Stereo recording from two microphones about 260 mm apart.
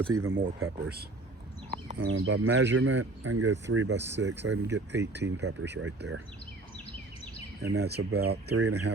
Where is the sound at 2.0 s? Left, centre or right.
Right.